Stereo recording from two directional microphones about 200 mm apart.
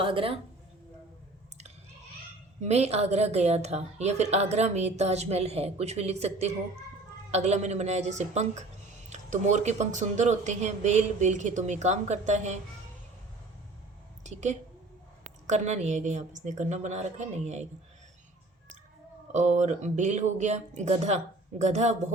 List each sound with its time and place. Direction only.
0.0 s a woman's voice: 25° right (ahead or behind)
2.6 s a woman's voice: 35° right (ahead or behind)
14.3 s a woman's voice: 35° right (ahead or behind)
19.3 s a woman's voice: 35° right (ahead or behind)